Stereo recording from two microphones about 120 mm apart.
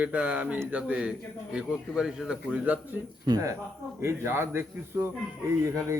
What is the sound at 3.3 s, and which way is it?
Speech, 25° right (ahead or behind).